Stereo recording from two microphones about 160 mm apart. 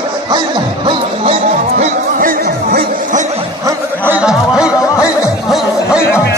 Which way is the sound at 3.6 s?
10° right (ahead or behind).